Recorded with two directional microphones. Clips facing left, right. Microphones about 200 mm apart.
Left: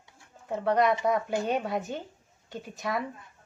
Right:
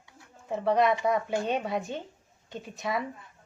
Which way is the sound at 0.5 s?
Centre (ahead or behind).